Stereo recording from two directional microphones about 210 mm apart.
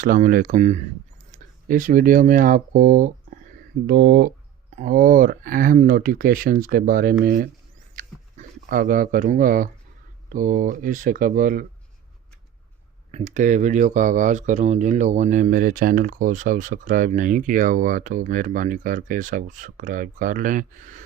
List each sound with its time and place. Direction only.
0.0 s speech: 40° right (ahead or behind)
3.8 s speech: 50° right (ahead or behind)
7.9 s a sound: 40° right (ahead or behind)
10.3 s speech: 40° right (ahead or behind)
13.1 s speech: 35° right (ahead or behind)